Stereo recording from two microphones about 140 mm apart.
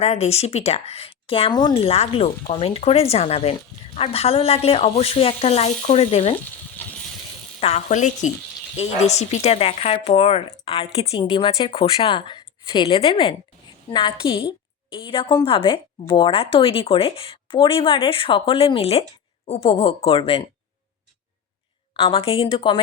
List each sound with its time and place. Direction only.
0.0 s speech: 50° left (ahead or behind); by 1.8 s 30° left (ahead or behind)
1.8 s speech: 45° left (ahead or behind)
7.6 s speech: 55° left (ahead or behind)
21.9 s speech: 45° left (ahead or behind)